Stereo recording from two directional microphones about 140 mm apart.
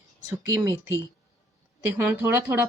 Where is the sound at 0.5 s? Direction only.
25° right (ahead or behind).